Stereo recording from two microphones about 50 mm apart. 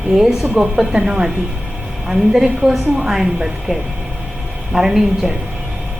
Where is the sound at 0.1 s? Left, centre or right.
Centre.